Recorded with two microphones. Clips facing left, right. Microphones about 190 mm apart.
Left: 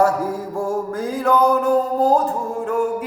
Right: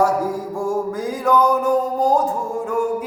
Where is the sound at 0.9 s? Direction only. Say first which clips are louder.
Left 1 dB; centre (ahead or behind).